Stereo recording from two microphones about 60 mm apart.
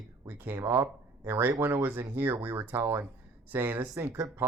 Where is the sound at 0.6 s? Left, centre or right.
Right.